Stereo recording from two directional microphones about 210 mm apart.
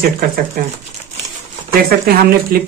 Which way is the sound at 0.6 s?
40° right (ahead or behind).